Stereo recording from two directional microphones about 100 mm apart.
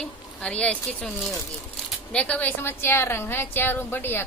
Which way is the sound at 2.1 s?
15° left (ahead or behind).